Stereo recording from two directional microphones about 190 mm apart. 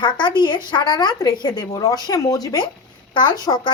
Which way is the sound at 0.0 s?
25° left (ahead or behind).